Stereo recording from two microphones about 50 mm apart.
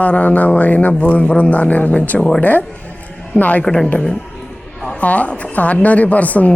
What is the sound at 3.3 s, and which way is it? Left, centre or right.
Mantra, left.